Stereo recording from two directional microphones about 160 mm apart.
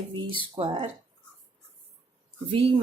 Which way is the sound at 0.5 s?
30° right (ahead or behind).